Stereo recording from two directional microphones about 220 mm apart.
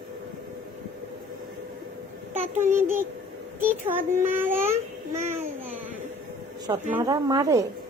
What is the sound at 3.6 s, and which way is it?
Speech, 10° right (ahead or behind).